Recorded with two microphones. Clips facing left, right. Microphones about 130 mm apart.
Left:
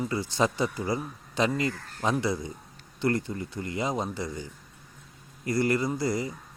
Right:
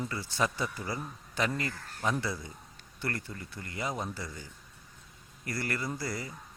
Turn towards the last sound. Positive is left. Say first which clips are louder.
# left 8 dB
turn(degrees=20)  # may be behind; listen again after turning